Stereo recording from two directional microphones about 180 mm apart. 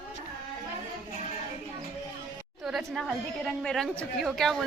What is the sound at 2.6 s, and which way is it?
A woman's voice, centre (ahead or behind).